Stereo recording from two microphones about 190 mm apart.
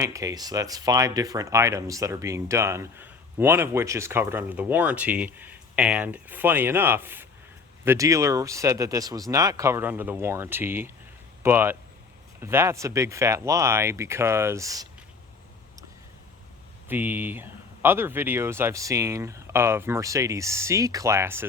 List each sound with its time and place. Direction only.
0.0 s speech: 15° right (ahead or behind)
16.9 s speech: 10° right (ahead or behind)